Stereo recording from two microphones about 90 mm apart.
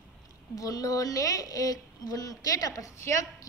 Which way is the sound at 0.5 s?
40° left (ahead or behind).